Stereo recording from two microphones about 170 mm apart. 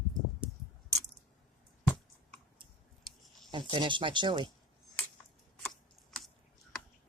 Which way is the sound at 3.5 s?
30° right (ahead or behind).